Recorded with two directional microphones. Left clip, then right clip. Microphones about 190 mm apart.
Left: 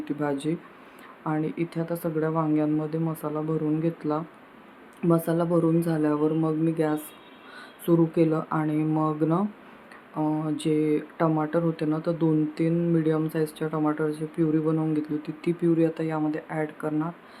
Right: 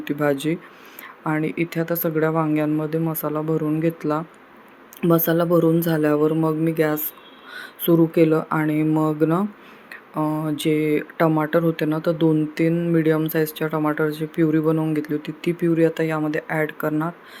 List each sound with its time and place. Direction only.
0.0 s speech: 15° right (ahead or behind)
9.9 s a sound: 5° right (ahead or behind)
10.4 s speech: 10° right (ahead or behind)